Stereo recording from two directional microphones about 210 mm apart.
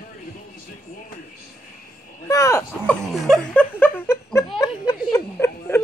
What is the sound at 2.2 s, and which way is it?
Speech, 15° left (ahead or behind).